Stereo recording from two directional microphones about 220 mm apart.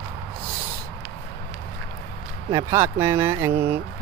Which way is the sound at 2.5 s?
10° right (ahead or behind).